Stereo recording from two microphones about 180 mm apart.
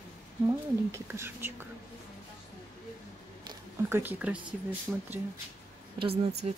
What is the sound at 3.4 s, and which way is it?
Speech, 10° right (ahead or behind).